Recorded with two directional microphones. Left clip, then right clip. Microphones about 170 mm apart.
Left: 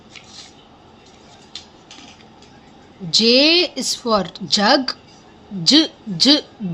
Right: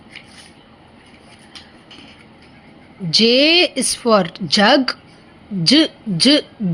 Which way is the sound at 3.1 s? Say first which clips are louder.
Right 1 dB; 15° right (ahead or behind).